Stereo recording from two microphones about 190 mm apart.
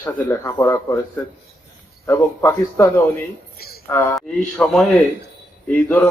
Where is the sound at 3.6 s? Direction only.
55° left (ahead or behind).